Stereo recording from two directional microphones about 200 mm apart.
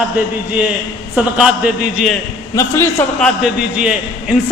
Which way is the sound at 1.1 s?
5° right (ahead or behind).